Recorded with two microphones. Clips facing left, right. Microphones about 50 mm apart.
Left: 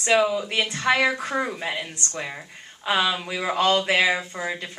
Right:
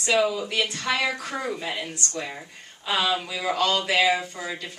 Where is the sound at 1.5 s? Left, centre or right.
Centre.